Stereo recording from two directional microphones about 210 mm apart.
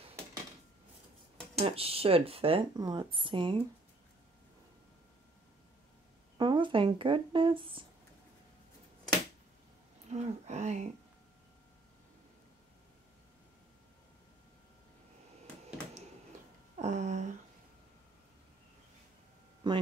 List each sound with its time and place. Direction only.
1.6 s speech: 25° right (ahead or behind)
6.3 s speech: 20° right (ahead or behind)
10.1 s speech: 35° right (ahead or behind)
16.7 s a sound: 35° right (ahead or behind)
19.6 s speech: 20° right (ahead or behind)